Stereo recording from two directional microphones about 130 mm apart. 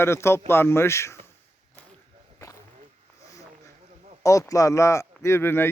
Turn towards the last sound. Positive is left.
turn(degrees=20)  # may be behind; listen again after turning